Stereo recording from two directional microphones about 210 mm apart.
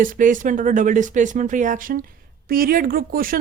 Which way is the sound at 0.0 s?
40° right (ahead or behind).